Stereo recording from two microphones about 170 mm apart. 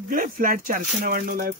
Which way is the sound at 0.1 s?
55° right (ahead or behind).